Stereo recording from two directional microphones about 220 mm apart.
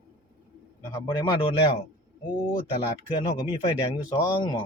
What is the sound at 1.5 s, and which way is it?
Speech, 25° left (ahead or behind).